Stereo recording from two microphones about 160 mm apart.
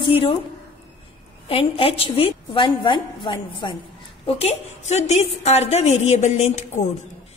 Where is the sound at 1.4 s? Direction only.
35° left (ahead or behind).